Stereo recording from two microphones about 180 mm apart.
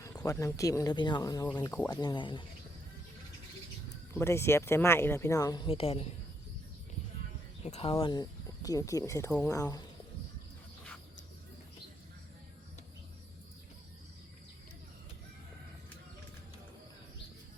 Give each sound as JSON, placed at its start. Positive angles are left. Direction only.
{"t": 0.0, "sound": "speech", "side_deg": 20}
{"t": 4.1, "sound": "speech", "side_deg": 15}
{"t": 7.6, "sound": "speech", "side_deg": 35}